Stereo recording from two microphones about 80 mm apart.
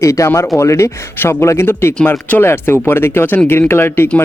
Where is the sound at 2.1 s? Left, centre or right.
Centre.